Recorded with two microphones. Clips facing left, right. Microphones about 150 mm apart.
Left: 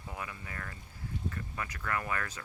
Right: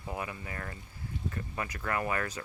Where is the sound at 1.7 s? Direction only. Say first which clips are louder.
Right 3 dB; 25° right (ahead or behind).